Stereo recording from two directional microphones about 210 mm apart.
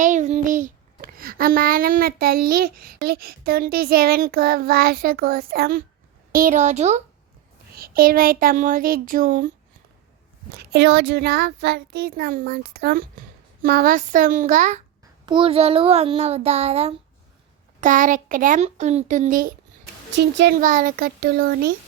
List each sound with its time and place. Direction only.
0.0 s a child's voice: 35° right (ahead or behind)
10.6 s a child's voice: 50° right (ahead or behind)
15.3 s a child's voice: 25° right (ahead or behind); by 19.5 s 40° right (ahead or behind)
20.1 s a child's voice: 55° right (ahead or behind)
20.6 s a child's voice: 40° right (ahead or behind)